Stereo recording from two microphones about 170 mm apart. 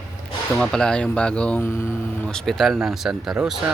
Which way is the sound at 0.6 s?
5° left (ahead or behind).